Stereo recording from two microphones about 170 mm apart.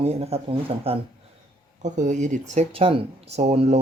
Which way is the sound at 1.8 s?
45° right (ahead or behind).